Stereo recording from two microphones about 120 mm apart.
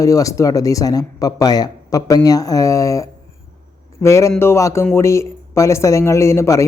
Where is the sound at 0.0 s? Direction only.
30° left (ahead or behind).